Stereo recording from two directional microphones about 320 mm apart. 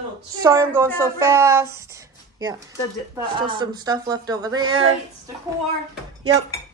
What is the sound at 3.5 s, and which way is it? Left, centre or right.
Speech, centre.